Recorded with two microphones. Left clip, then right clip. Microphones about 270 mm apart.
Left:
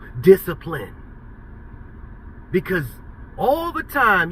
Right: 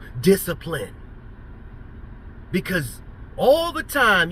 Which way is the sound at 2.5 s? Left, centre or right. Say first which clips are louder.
Left 3 dB; centre.